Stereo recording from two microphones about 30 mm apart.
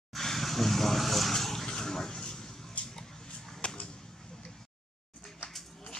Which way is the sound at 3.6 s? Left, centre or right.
Left.